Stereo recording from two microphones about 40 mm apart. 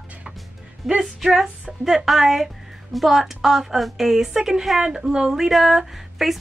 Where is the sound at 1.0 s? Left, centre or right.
Centre.